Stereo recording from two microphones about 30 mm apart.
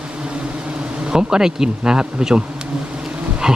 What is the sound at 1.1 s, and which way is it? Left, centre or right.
Speech, right.